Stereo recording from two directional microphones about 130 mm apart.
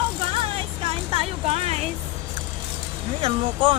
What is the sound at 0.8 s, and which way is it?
Music, 45° right (ahead or behind).